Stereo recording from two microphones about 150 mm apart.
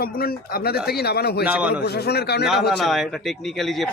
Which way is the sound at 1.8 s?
90° left.